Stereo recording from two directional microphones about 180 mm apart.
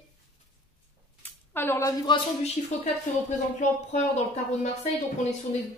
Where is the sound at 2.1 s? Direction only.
25° left (ahead or behind).